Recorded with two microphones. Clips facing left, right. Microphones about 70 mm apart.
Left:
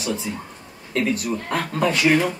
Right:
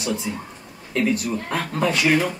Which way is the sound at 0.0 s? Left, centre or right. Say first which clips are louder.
Even; centre.